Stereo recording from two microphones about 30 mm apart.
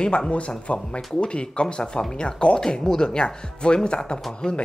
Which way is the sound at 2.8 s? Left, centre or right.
Left.